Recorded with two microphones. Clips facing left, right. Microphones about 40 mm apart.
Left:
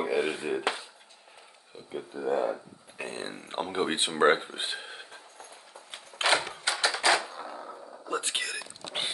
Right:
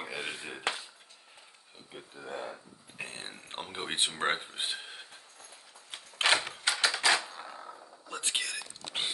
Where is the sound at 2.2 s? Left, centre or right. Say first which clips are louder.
Left 12 dB; centre.